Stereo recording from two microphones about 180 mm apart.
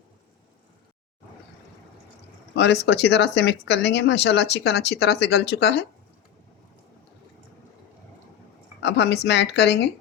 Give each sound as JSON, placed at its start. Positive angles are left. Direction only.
{"t": 2.6, "sound": "speech", "side_deg": 70}
{"t": 8.8, "sound": "speech", "side_deg": 70}